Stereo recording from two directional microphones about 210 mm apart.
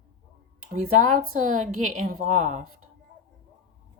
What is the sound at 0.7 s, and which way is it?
A woman's voice, 40° right (ahead or behind).